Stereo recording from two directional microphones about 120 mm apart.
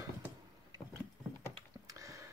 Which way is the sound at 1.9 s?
25° right (ahead or behind).